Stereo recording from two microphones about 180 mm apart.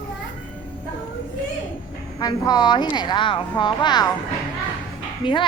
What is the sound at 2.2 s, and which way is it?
Speech, 25° left (ahead or behind).